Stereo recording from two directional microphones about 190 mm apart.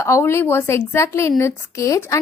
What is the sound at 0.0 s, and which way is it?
A woman's voice, 15° left (ahead or behind).